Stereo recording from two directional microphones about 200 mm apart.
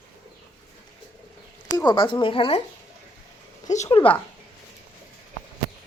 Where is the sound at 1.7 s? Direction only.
20° left (ahead or behind).